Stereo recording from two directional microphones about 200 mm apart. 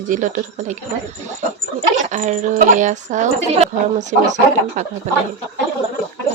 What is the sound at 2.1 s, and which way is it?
Speech, 35° right (ahead or behind).